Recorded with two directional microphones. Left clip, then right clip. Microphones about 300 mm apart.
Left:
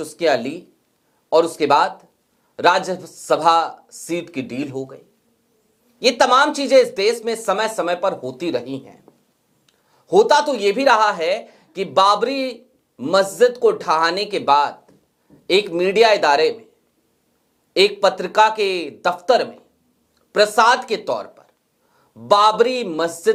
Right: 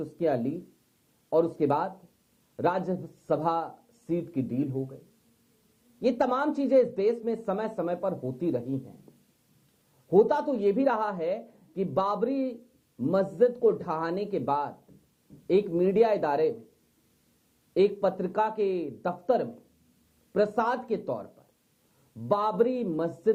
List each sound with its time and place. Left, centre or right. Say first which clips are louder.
0.0 s speech: left 10 dB; centre
4.7 s speech: left 6 dB; left
6.0 s speech: left 12 dB; centre
8.1 s speech: left 8 dB; left
8.4 s speech: left 7 dB; centre
8.8 s a sound: left 6 dB; centre
10.2 s speech: left 10 dB; centre
17.7 s speech: left 9 dB; centre